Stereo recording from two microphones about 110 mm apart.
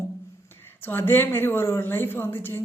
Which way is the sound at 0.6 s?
20° left (ahead or behind).